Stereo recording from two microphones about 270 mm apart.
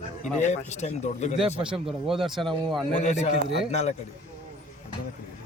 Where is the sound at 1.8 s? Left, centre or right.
Centre.